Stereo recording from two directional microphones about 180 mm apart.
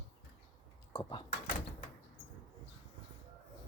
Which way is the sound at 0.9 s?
20° left (ahead or behind).